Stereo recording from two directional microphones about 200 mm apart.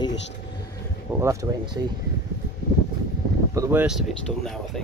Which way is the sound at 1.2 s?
15° right (ahead or behind).